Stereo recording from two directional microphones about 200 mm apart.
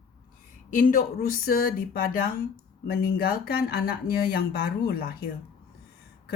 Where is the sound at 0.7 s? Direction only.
45° left (ahead or behind).